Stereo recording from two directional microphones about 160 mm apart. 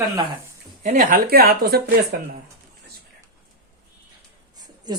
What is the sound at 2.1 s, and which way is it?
Speech, 60° right (ahead or behind).